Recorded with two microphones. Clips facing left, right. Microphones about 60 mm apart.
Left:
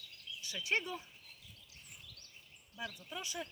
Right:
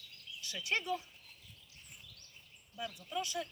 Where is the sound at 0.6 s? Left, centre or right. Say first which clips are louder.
Right 1 dB; left.